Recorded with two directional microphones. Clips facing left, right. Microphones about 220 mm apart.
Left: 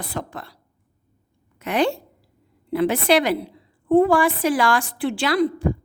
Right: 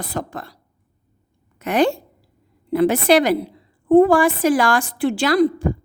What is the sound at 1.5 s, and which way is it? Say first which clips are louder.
A woman's voice: right 3 dB; 45° right (ahead or behind).